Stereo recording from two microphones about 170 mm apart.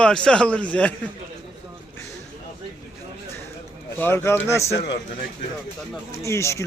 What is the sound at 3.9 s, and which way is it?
Speech, 15° left (ahead or behind).